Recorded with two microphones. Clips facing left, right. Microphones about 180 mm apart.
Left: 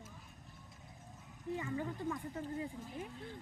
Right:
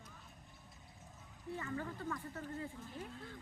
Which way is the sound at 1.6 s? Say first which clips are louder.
Left 2 dB; 15° left (ahead or behind).